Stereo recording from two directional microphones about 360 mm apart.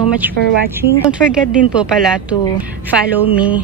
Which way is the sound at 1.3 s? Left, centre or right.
Centre.